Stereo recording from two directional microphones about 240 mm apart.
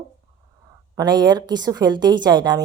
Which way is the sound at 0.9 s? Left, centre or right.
Centre.